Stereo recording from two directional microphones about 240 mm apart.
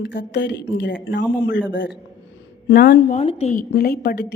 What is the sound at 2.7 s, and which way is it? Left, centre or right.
Speech, left.